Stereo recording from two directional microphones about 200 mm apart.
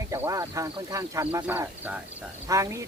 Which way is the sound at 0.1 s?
15° right (ahead or behind).